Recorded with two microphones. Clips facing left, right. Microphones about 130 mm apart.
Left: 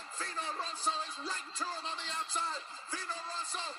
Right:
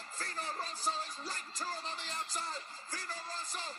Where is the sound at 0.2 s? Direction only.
40° right (ahead or behind).